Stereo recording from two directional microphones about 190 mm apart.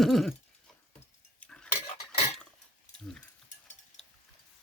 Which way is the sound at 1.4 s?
5° left (ahead or behind).